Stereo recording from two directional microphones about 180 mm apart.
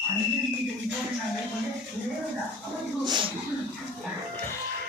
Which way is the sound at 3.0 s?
25° right (ahead or behind).